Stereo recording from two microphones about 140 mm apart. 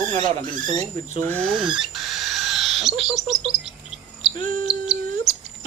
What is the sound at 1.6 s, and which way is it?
Bird, 5° right (ahead or behind).